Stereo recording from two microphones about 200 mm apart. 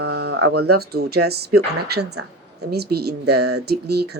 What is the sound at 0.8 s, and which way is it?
Speech, 50° right (ahead or behind).